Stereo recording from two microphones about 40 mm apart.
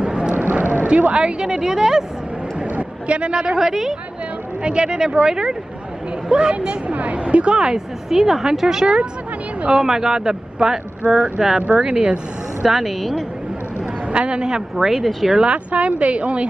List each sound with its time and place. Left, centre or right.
0.0 s a sound: right
0.4 s a sound: right
0.8 s speech: right
2.7 s a sound: right
3.5 s speech: centre
4.6 s speech: right
6.9 s a woman's voice: right; by 10.8 s centre
11.1 s a woman's voice: right
11.3 s speech: centre
11.6 s speech: right
12.6 s speech: centre
14.1 s speech: right; by 15.3 s centre
15.4 s a woman's voice: right